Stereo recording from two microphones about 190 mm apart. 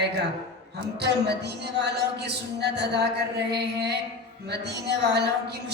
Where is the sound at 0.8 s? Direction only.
60° right (ahead or behind).